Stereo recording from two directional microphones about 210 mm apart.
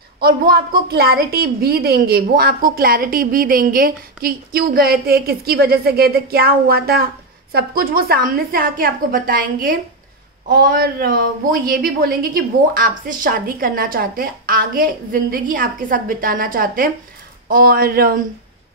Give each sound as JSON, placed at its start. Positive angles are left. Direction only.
{"t": 0.2, "sound": "a woman's voice", "side_deg": -45}